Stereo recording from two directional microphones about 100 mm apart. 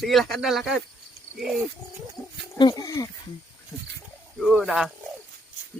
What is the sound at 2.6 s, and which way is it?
Speech, 45° left (ahead or behind).